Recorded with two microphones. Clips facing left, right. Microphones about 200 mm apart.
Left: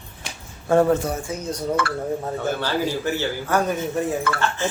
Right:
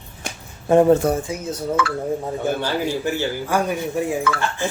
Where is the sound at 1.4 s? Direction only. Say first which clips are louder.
Right 1 dB; 5° right (ahead or behind).